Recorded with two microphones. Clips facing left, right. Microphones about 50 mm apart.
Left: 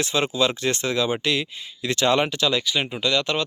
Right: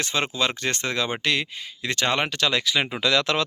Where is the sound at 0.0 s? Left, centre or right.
Right.